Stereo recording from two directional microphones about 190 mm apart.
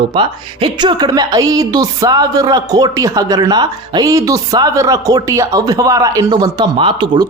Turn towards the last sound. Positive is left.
turn(degrees=-25)  # may be behind; listen again after turning